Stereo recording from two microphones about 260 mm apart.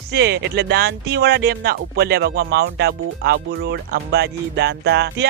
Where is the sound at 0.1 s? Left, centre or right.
Right.